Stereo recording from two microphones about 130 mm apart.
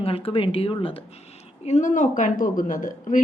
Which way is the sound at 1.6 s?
70° left (ahead or behind).